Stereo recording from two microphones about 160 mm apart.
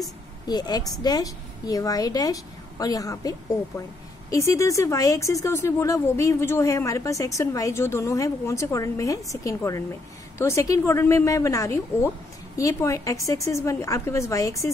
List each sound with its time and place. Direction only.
0.5 s speech: 25° left (ahead or behind)